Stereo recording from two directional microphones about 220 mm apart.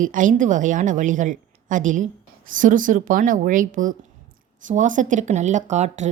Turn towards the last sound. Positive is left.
turn(degrees=-30)  # may be behind; listen again after turning